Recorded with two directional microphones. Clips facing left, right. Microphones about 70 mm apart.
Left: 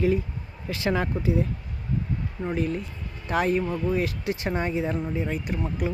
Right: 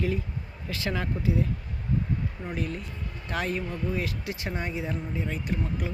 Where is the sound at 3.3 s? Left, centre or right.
Left.